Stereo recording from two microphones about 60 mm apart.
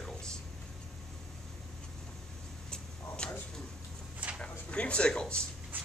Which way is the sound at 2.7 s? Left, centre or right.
Centre.